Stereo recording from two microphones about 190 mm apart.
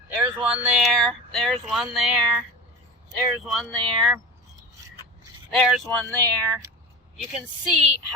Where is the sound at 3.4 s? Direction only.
Centre (ahead or behind).